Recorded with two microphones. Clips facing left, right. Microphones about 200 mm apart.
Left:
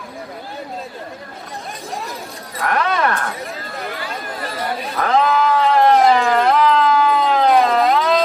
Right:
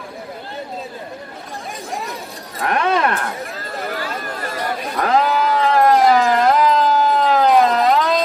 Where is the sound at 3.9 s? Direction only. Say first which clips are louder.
Right 2 dB; 40° right (ahead or behind).